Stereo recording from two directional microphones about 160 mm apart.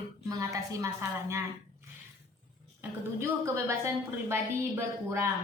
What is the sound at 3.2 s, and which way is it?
A woman's voice, 15° right (ahead or behind).